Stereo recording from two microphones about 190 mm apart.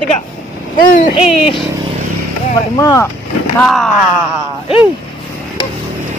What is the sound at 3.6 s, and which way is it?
Speech, centre (ahead or behind).